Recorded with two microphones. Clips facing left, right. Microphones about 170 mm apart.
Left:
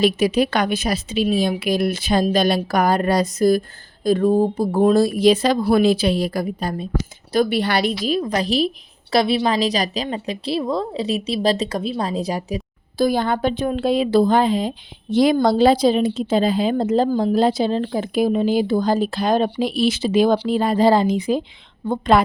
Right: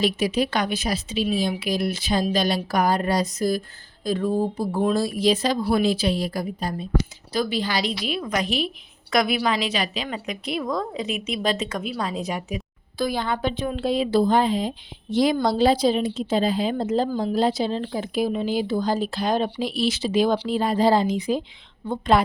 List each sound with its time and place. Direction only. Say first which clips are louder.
0.0 s a woman's voice: left 5 dB; 65° left (ahead or behind)